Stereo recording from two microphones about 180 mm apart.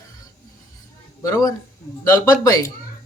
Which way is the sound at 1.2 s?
20° left (ahead or behind).